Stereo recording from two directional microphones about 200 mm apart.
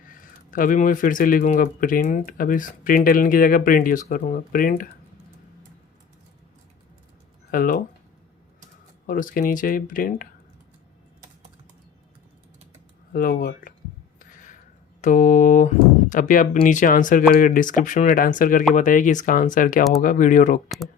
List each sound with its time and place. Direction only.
0.1 s speech: 40° left (ahead or behind)
7.5 s speech: 45° left (ahead or behind)
9.0 s speech: 45° left (ahead or behind)
13.1 s speech: 45° left (ahead or behind)
14.2 s a sound: 40° left (ahead or behind)
15.0 s speech: 40° left (ahead or behind)
20.7 s speech: centre (ahead or behind)